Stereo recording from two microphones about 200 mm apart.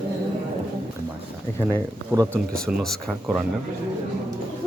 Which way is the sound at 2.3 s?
5° left (ahead or behind).